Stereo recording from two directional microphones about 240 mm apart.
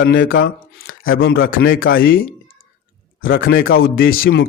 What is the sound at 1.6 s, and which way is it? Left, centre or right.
Speech, left.